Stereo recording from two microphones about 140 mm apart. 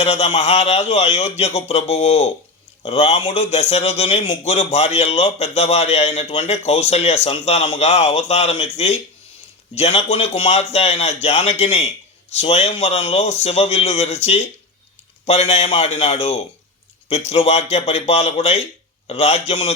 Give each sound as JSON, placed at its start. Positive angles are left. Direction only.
{"t": 0.0, "sound": "a man's voice", "side_deg": 50}